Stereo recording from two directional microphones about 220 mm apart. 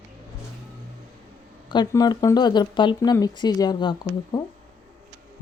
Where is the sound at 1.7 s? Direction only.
20° left (ahead or behind).